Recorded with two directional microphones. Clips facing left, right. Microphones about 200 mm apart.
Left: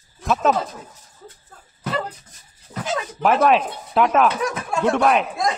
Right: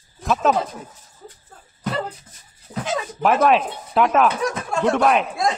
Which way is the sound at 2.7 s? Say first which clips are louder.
Right 2 dB; 15° right (ahead or behind).